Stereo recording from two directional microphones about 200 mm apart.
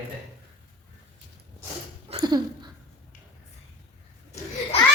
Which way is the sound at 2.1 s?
20° right (ahead or behind).